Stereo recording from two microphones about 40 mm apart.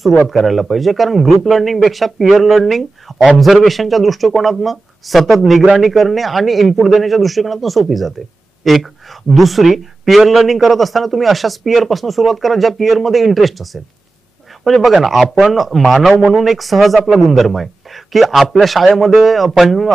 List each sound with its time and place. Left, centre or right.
0.3 s speech: centre
9.3 s speech: centre